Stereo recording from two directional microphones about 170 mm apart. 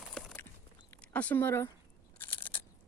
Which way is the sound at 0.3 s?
10° left (ahead or behind).